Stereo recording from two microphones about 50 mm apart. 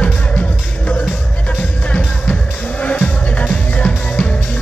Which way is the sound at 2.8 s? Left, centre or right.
Left.